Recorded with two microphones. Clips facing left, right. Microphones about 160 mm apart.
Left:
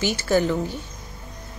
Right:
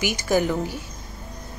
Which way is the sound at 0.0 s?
15° right (ahead or behind).